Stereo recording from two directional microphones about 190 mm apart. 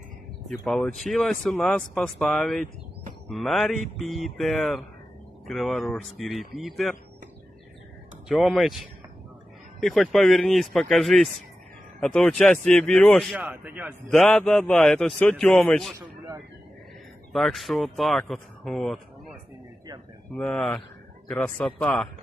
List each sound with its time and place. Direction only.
0.5 s speech: centre (ahead or behind)
8.3 s speech: centre (ahead or behind)
13.4 s a man's voice: 10° right (ahead or behind)
14.1 s speech: 5° left (ahead or behind)
17.3 s speech: centre (ahead or behind)
20.3 s speech: 5° left (ahead or behind)